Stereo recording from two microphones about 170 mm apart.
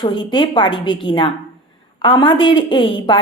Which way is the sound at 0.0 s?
25° left (ahead or behind).